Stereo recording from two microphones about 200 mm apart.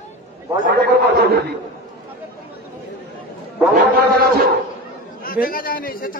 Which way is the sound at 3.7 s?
50° right (ahead or behind).